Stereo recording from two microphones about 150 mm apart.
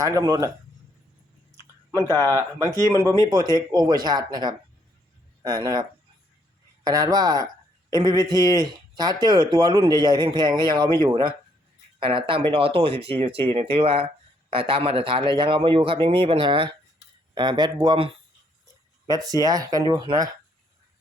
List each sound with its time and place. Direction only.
0.0 s speech: 25° right (ahead or behind)
1.9 s speech: 25° right (ahead or behind)
6.8 s speech: 25° right (ahead or behind)